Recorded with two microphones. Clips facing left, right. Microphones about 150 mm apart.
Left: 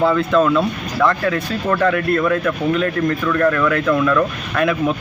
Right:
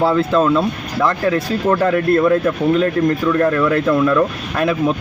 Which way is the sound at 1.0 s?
35° right (ahead or behind).